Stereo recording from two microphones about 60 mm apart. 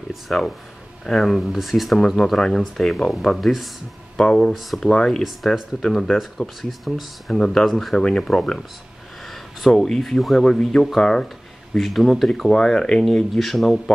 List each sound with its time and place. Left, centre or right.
0.3 s speech: centre
1.0 s speech: centre
2.0 s speech: centre
13.0 s speech: centre